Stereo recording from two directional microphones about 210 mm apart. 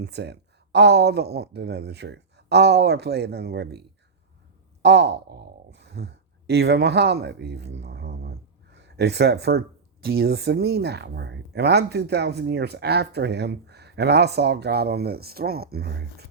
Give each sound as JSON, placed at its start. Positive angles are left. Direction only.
{"t": 0.0, "sound": "speech", "side_deg": -50}